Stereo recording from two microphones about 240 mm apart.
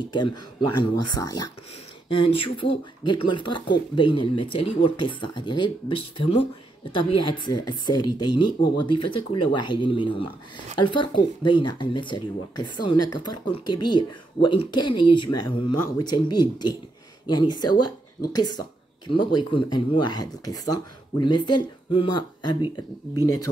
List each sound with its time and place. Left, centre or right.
0.1 s speech: centre
17.6 s speech: left
19.1 s speech: centre
23.2 s speech: left